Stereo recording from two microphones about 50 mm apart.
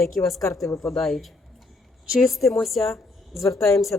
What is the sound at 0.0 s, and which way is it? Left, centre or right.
A woman's voice, centre.